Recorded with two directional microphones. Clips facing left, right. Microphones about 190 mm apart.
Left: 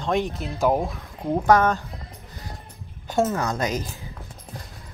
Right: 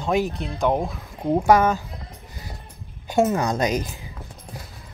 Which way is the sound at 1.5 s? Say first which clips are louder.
Even; 10° right (ahead or behind).